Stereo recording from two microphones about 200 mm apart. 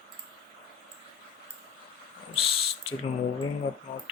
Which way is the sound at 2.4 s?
30° left (ahead or behind).